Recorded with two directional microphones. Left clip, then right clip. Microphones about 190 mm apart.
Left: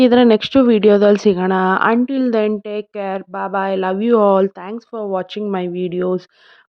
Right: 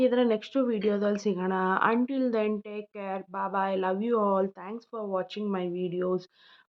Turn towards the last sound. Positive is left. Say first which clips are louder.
# left 10 dB
turn(degrees=45)  # may be behind; listen again after turning